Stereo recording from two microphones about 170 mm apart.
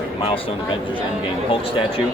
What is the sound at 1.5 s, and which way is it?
Speech, 30° left (ahead or behind).